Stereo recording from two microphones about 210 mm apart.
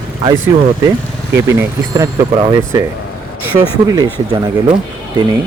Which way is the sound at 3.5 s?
20° right (ahead or behind).